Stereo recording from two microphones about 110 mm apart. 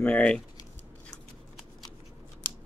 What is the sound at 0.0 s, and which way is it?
Speech, 10° left (ahead or behind).